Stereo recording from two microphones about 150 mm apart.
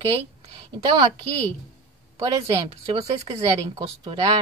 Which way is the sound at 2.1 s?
35° right (ahead or behind).